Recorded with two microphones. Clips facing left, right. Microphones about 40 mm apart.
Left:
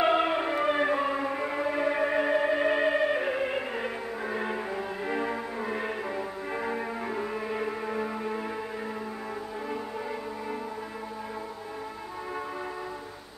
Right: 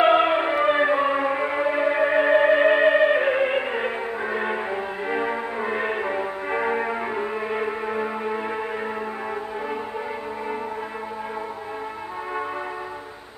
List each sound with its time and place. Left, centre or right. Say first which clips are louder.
0.0 s music: right 7 dB; right